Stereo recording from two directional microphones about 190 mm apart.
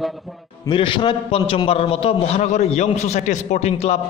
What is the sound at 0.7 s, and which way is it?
A man's voice, 25° left (ahead or behind).